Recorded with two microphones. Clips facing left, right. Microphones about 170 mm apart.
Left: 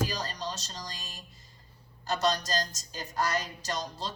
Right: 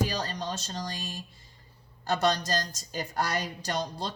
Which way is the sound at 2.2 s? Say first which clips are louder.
Right 1 dB; 55° right (ahead or behind).